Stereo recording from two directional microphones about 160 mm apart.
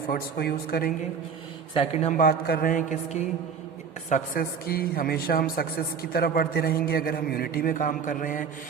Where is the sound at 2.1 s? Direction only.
70° left (ahead or behind).